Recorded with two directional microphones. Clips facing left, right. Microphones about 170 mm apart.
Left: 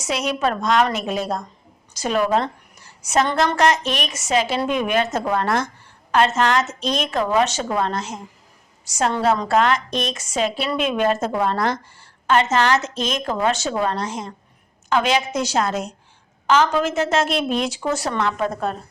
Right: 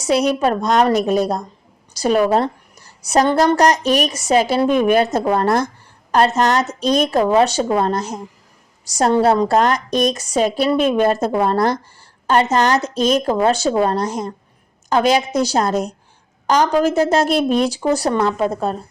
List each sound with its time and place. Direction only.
0.0 s a woman's voice: 35° right (ahead or behind)